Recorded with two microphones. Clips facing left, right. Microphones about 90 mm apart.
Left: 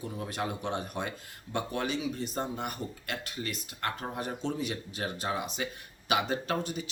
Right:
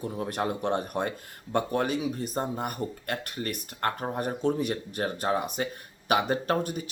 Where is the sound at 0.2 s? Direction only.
50° right (ahead or behind).